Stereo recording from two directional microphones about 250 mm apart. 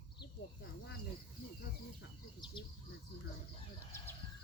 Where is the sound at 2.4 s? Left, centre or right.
Centre.